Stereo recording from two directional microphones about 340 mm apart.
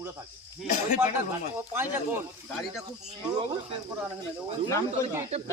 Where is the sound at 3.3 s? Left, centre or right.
Centre.